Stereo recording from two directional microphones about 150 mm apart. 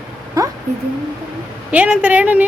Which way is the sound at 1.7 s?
10° right (ahead or behind).